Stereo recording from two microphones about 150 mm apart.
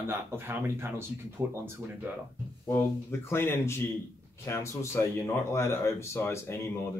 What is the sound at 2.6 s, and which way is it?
Speech, 15° left (ahead or behind).